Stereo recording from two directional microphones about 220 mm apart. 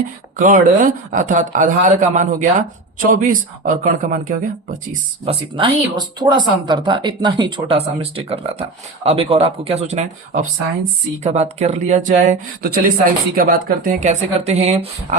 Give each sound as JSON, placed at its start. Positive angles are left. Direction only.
{"t": 0.3, "sound": "speech", "side_deg": -35}
{"t": 5.2, "sound": "speech", "side_deg": -25}